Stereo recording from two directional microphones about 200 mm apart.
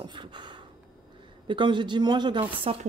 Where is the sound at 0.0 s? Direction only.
20° right (ahead or behind).